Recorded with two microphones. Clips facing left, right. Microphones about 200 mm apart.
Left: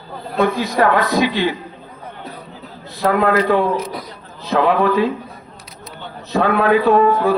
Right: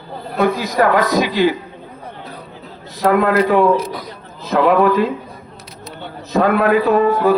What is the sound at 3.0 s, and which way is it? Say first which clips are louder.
A man's voice: right 2 dB; 45° right (ahead or behind).